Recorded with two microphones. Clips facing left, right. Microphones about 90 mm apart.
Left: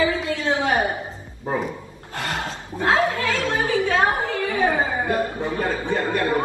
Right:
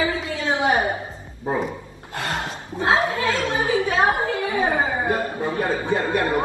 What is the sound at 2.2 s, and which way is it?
A woman's voice, 25° right (ahead or behind).